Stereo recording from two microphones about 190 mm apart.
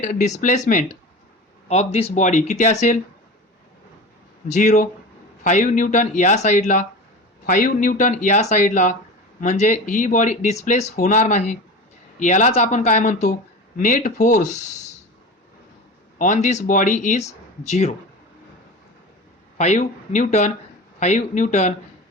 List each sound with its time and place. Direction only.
0.0 s speech: 40° left (ahead or behind)
4.4 s speech: 40° left (ahead or behind)
16.1 s speech: 40° left (ahead or behind)
19.5 s speech: 35° left (ahead or behind)